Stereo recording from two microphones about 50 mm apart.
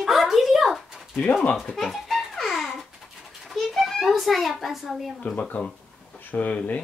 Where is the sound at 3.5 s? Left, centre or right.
Centre.